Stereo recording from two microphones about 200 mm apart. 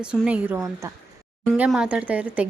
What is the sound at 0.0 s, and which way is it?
Speech, 5° right (ahead or behind).